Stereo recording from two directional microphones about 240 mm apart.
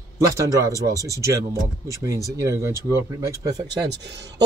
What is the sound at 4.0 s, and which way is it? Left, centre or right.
Speech, right.